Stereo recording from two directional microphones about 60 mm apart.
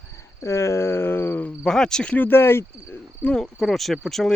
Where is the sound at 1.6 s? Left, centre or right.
Centre.